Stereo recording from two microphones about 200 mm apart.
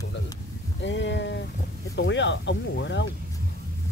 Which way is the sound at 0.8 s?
65° left (ahead or behind).